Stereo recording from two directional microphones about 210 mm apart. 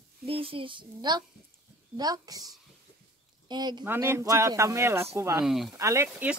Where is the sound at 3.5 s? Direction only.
20° right (ahead or behind).